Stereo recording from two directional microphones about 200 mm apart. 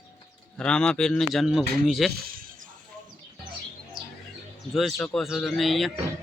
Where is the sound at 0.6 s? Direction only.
5° left (ahead or behind).